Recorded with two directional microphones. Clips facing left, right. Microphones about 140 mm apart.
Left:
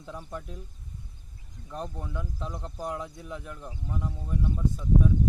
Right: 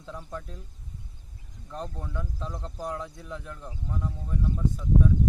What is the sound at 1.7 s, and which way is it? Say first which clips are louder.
Speech: even; 10° left (ahead or behind).